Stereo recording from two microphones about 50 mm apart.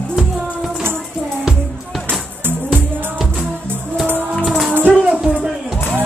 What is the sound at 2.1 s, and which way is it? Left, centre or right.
Music, right.